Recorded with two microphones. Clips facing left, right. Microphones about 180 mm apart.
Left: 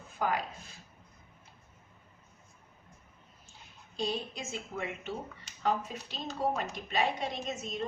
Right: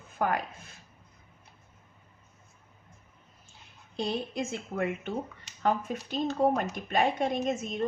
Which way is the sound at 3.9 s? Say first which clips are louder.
Right 3 dB; 55° right (ahead or behind).